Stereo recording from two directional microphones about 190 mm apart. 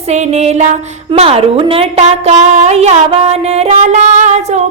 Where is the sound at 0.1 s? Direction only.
35° right (ahead or behind).